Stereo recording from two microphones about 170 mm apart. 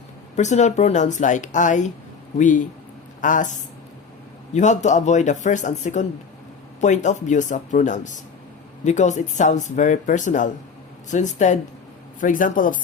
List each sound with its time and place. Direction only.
0.3 s speech: 45° left (ahead or behind)